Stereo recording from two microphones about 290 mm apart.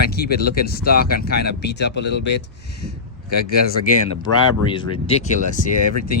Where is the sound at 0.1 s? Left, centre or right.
Left.